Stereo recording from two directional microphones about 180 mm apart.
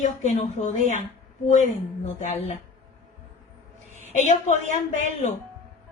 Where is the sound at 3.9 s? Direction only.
40° left (ahead or behind).